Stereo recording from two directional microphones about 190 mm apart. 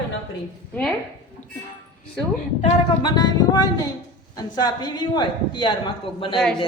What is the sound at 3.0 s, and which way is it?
Speech, 20° left (ahead or behind).